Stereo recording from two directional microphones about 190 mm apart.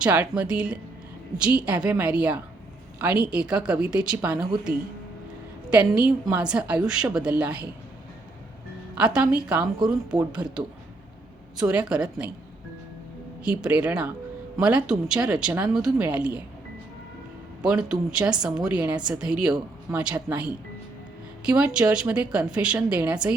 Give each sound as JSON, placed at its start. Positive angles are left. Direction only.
{"t": 0.0, "sound": "a woman's voice", "side_deg": -5}
{"t": 5.7, "sound": "a woman's voice", "side_deg": -5}
{"t": 9.0, "sound": "a woman's voice", "side_deg": -5}
{"t": 13.4, "sound": "a woman's voice", "side_deg": -5}
{"t": 17.6, "sound": "a woman's voice", "side_deg": -5}